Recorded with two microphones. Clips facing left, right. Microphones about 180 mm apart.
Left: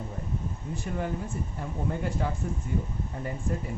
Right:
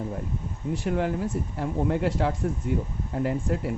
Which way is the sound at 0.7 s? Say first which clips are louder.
Right 7 dB; 70° right (ahead or behind).